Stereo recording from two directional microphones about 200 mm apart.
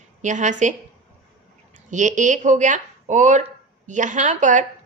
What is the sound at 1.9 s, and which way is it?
A woman's voice, 40° right (ahead or behind).